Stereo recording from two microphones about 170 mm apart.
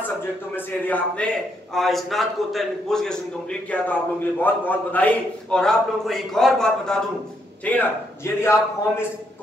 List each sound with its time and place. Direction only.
0.7 s a man's voice: 10° left (ahead or behind)
4.4 s a man's voice: 10° left (ahead or behind)